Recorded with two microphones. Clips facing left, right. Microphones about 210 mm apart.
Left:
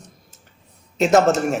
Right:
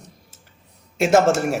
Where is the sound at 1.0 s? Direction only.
10° right (ahead or behind).